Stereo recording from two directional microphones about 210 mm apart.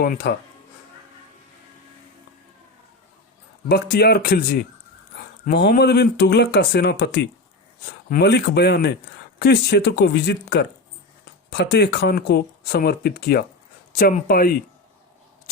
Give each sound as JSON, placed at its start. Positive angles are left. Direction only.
{"t": 0.0, "sound": "speech", "side_deg": 50}
{"t": 3.7, "sound": "speech", "side_deg": 50}
{"t": 5.1, "sound": "dog", "side_deg": 50}
{"t": 5.5, "sound": "speech", "side_deg": 50}